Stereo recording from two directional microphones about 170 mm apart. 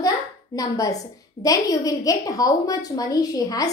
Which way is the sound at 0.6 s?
20° left (ahead or behind).